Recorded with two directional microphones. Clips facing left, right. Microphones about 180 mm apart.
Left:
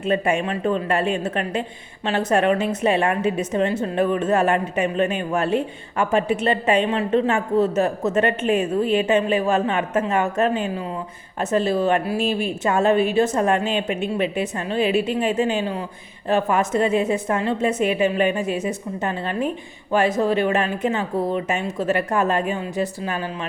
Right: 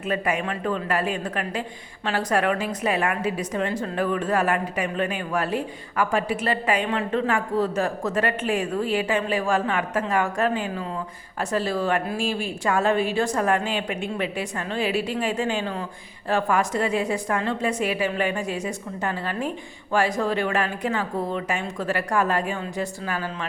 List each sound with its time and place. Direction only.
0.0 s a woman's voice: 25° left (ahead or behind)